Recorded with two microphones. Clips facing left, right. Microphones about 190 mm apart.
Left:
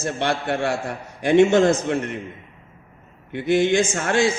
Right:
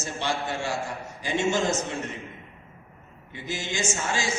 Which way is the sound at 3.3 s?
60° left (ahead or behind).